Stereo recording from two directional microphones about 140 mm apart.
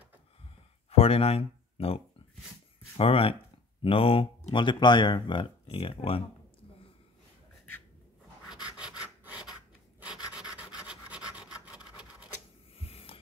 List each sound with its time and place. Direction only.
0.8 s speech: 45° left (ahead or behind)
3.0 s speech: 40° left (ahead or behind)
8.7 s rub: 5° right (ahead or behind)
12.7 s a sound: 45° left (ahead or behind)